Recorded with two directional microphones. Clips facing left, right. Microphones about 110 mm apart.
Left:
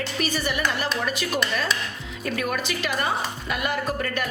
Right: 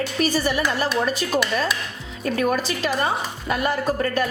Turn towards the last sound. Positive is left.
turn(degrees=-35)  # may be behind; listen again after turning